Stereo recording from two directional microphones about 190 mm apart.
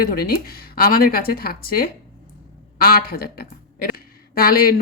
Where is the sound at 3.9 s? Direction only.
50° left (ahead or behind).